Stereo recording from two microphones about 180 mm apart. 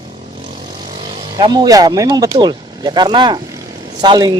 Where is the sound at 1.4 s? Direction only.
25° right (ahead or behind).